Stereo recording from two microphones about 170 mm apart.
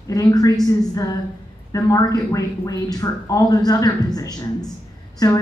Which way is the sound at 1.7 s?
20° left (ahead or behind).